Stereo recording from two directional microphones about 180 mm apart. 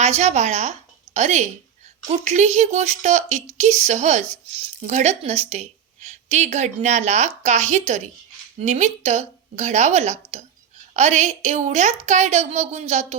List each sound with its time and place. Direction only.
0.0 s speech: 40° right (ahead or behind)